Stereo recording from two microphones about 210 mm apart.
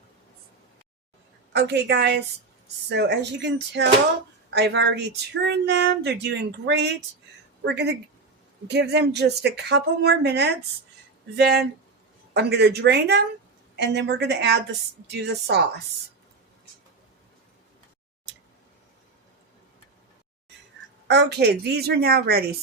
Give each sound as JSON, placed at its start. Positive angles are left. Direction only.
{"t": 1.5, "sound": "speech", "side_deg": -55}
{"t": 21.1, "sound": "speech", "side_deg": -50}